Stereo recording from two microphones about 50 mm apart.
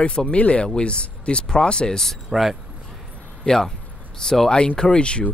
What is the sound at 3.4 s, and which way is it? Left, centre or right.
Speech, centre.